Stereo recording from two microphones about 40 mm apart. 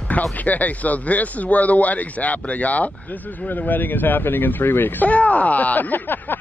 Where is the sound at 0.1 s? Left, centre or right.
Left.